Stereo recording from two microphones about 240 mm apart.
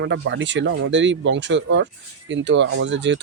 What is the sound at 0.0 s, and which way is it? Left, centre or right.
Speech, right.